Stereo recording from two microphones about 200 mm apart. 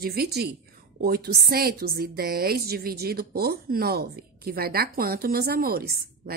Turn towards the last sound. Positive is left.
turn(degrees=-50)  # may be behind; listen again after turning